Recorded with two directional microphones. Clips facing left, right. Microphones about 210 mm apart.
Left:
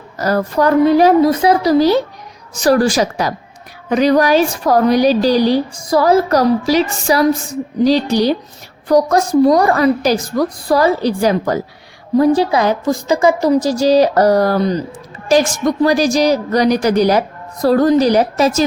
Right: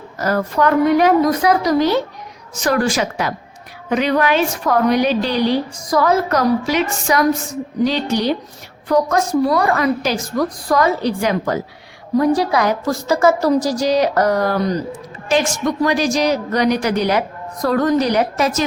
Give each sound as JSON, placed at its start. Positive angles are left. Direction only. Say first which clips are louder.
{"t": 0.2, "sound": "a woman's voice", "louder": "left 2 dB", "side_deg": 35}